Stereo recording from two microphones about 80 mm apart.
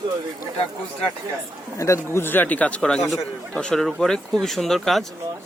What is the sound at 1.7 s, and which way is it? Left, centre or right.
Speech, left.